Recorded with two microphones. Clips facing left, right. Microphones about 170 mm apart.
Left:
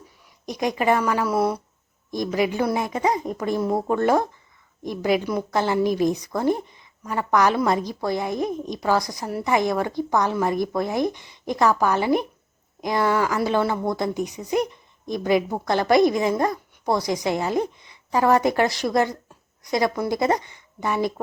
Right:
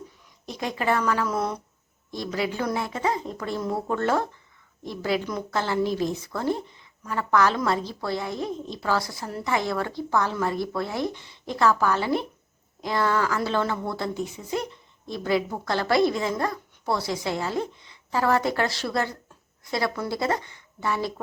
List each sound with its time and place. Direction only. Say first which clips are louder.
0.4 s a woman's voice: left 5 dB; 15° left (ahead or behind)